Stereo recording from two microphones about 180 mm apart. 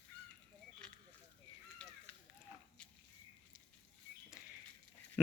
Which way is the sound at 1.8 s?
5° left (ahead or behind).